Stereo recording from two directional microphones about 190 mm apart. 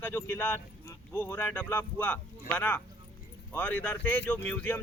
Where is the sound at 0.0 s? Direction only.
10° left (ahead or behind).